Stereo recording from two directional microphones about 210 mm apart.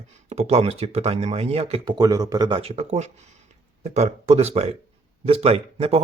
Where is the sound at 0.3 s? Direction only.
30° right (ahead or behind).